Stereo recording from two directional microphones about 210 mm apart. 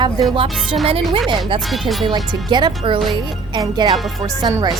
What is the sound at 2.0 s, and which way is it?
A woman's voice, 20° right (ahead or behind).